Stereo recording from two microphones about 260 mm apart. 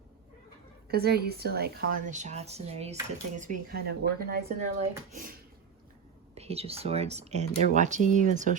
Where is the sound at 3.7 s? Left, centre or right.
Right.